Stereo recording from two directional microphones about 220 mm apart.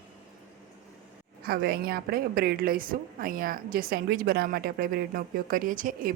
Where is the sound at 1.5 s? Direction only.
45° right (ahead or behind).